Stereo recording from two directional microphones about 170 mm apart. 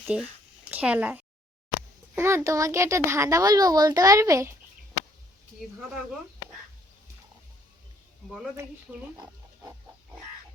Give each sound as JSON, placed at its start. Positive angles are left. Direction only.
{"t": 0.1, "sound": "a child's voice", "side_deg": -5}